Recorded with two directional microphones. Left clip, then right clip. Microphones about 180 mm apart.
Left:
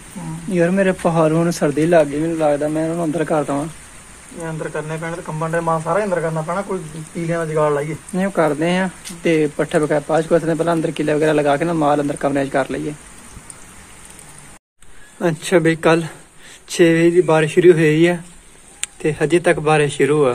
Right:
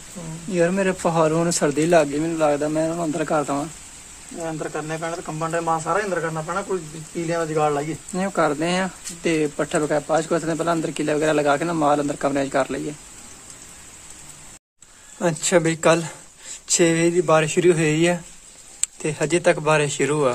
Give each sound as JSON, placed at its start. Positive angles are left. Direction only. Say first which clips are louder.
{"t": 0.5, "sound": "speech", "louder": "left 4 dB", "side_deg": 0}
{"t": 4.7, "sound": "speech", "louder": "left 2 dB", "side_deg": -80}
{"t": 7.3, "sound": "speech", "louder": "left 4 dB", "side_deg": -80}
{"t": 8.1, "sound": "speech", "louder": "left 4 dB", "side_deg": 0}
{"t": 15.1, "sound": "speech", "louder": "left 3 dB", "side_deg": -10}